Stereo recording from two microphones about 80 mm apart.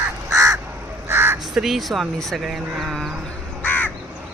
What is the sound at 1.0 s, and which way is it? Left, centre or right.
Crow, right.